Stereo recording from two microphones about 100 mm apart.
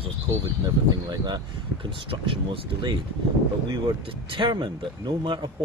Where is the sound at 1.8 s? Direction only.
60° right (ahead or behind).